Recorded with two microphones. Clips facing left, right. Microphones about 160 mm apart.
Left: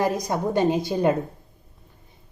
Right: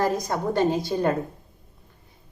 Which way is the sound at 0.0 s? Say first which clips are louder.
Left 1 dB; 15° left (ahead or behind).